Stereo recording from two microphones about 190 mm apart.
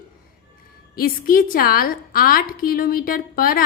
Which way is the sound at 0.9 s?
50° left (ahead or behind).